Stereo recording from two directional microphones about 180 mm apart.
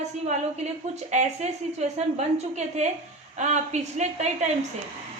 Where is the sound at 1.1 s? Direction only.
40° right (ahead or behind).